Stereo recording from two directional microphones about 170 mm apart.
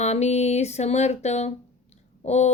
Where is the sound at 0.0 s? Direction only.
40° left (ahead or behind).